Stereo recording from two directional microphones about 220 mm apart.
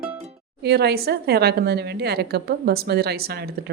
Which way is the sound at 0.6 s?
45° right (ahead or behind).